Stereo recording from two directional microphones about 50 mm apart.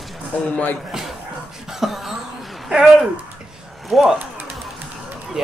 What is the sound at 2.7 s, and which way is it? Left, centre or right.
Speech, centre.